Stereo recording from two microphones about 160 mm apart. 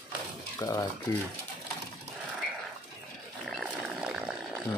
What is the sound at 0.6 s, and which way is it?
Speech, 25° left (ahead or behind).